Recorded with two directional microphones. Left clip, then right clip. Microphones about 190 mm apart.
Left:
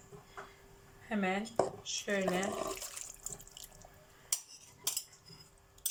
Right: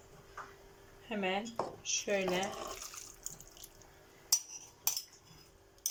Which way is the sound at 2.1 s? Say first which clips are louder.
Left 1 dB; 15° right (ahead or behind).